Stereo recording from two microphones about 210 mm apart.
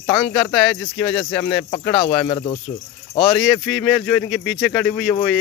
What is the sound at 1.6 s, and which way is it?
Speech, 20° left (ahead or behind).